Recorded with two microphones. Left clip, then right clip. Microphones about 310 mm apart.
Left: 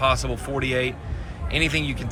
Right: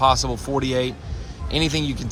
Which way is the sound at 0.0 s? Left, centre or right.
Centre.